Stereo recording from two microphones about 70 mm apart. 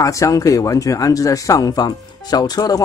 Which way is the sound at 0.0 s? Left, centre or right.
Left.